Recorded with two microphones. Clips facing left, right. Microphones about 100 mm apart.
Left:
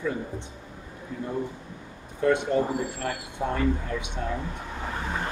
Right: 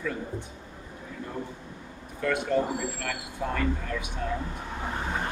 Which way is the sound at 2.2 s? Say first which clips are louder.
Left 3 dB; 25° left (ahead or behind).